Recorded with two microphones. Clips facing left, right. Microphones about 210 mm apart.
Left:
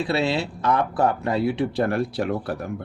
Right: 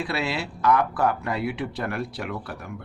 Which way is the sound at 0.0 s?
25° left (ahead or behind).